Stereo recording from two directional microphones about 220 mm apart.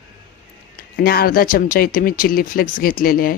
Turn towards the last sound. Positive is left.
turn(degrees=40)  # may be behind; listen again after turning